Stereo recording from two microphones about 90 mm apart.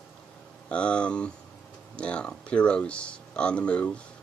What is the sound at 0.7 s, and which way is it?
Speech, 10° left (ahead or behind).